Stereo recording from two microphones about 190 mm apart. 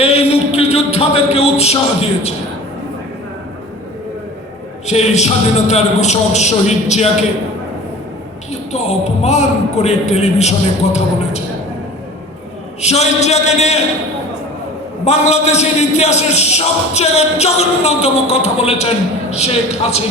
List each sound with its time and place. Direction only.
0.0 s a sound: 35° left (ahead or behind)
4.9 s a man's voice: 35° left (ahead or behind)
8.7 s a man's voice: 35° left (ahead or behind)
12.8 s a man's voice: 35° left (ahead or behind)
15.0 s a man's voice: 35° left (ahead or behind)